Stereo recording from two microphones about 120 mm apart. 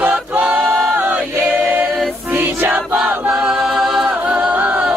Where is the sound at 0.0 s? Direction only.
10° right (ahead or behind).